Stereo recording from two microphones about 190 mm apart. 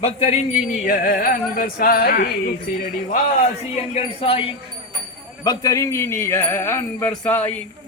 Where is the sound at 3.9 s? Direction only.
30° left (ahead or behind).